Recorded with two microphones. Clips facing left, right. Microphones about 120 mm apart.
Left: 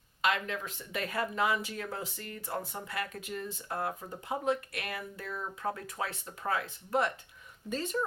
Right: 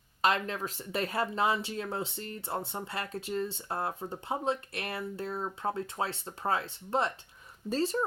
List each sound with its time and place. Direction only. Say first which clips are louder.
0.2 s speech: right 3 dB; 35° right (ahead or behind)